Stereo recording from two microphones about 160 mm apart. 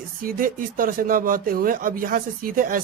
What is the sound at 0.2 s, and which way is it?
Speech, 60° right (ahead or behind).